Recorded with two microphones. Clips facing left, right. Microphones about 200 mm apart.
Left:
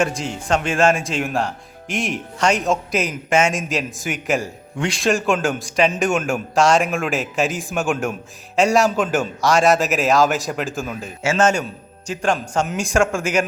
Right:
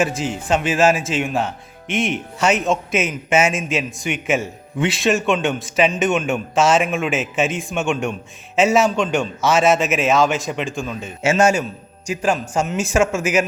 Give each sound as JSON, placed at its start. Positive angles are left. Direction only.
{"t": 0.0, "sound": "speech", "side_deg": -5}
{"t": 11.2, "sound": "a man's voice", "side_deg": -20}
{"t": 12.0, "sound": "speech", "side_deg": -5}